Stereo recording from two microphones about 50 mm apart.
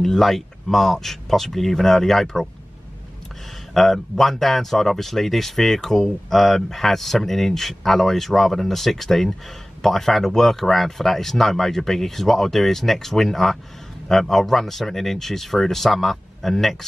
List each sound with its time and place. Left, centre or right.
0.0 s speech: centre
3.7 s speech: centre